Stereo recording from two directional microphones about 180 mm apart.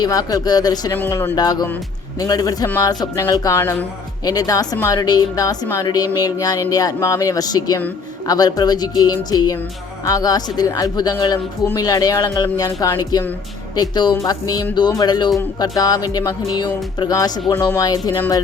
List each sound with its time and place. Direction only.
0.0 s a woman's voice: 20° left (ahead or behind)